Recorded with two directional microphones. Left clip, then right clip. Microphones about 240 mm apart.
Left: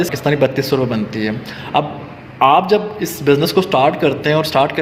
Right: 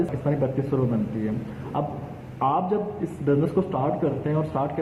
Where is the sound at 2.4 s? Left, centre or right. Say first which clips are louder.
Left 12 dB; left.